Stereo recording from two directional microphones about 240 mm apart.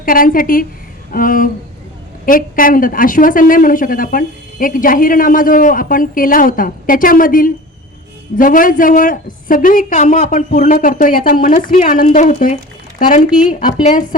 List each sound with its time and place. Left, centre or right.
0.0 s a woman's voice: left
13.7 s speech: centre